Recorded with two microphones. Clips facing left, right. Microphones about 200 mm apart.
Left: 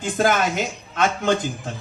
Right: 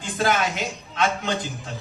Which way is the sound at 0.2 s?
45° left (ahead or behind).